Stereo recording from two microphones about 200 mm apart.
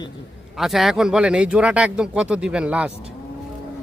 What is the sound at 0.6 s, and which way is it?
Speech, centre (ahead or behind).